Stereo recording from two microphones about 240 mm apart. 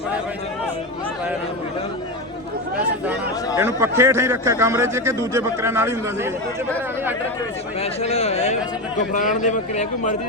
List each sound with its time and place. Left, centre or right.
3.6 s a man's voice: centre
7.8 s speech: left